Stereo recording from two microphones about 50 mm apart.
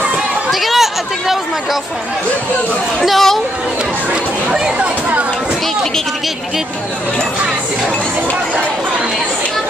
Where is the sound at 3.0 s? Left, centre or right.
Centre.